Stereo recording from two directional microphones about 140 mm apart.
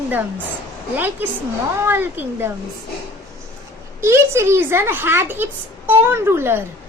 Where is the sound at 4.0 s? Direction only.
20° right (ahead or behind).